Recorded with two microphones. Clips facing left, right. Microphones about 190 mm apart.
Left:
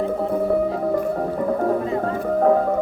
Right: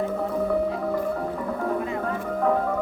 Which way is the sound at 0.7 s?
40° left (ahead or behind).